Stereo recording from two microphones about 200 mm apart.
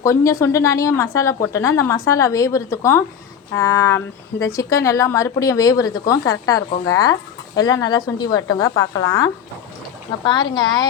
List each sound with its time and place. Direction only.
0.0 s a woman's voice: 15° left (ahead or behind)
10.5 s speech: 20° left (ahead or behind)